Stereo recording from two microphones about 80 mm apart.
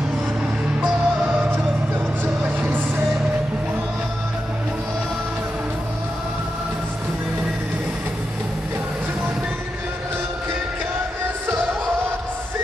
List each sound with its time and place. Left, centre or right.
0.7 s music: right